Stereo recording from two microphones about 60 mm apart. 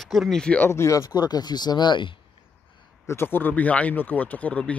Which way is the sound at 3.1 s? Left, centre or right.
Left.